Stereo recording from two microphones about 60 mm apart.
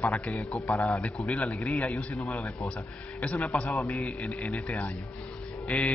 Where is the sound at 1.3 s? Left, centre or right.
Left.